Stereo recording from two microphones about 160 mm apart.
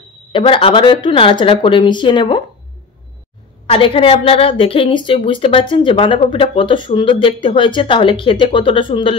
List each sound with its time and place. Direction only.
0.3 s a woman's voice: 35° left (ahead or behind)
3.7 s a woman's voice: 35° left (ahead or behind)